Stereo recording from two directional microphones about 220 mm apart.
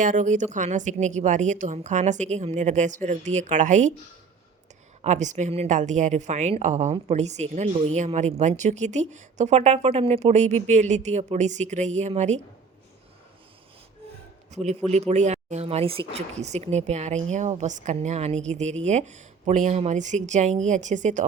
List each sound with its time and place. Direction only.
0.0 s a woman's voice: 35° right (ahead or behind)
5.0 s a woman's voice: 35° right (ahead or behind)
14.5 s a man's voice: 30° right (ahead or behind)